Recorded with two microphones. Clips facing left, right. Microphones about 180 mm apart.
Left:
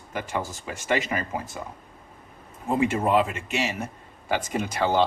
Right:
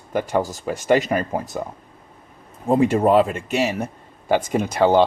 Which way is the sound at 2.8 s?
40° right (ahead or behind).